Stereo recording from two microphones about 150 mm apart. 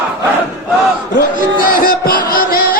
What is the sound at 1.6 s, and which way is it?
Music, 70° left (ahead or behind).